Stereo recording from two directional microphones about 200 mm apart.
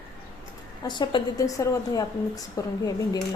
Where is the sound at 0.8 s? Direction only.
20° left (ahead or behind).